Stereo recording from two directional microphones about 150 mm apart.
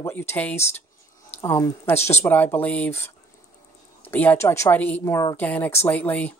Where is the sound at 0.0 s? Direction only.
15° left (ahead or behind).